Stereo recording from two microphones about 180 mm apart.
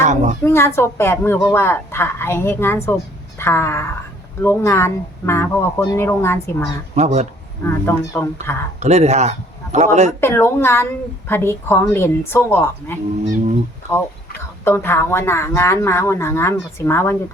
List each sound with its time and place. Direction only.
0.0 s a sound: 40° right (ahead or behind)
0.4 s speech: 15° left (ahead or behind)
6.9 s speech: 40° right (ahead or behind)
7.6 s speech: 15° left (ahead or behind)
8.8 s speech: 40° right (ahead or behind)
10.2 s speech: 15° left (ahead or behind)
14.6 s speech: 15° left (ahead or behind)